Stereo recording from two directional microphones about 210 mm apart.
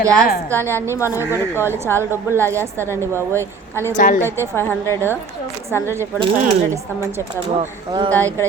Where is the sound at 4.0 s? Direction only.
40° left (ahead or behind).